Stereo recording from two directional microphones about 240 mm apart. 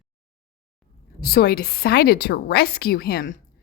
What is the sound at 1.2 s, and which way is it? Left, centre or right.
A woman's voice, left.